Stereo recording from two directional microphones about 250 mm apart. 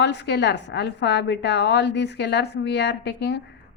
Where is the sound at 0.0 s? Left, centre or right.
Left.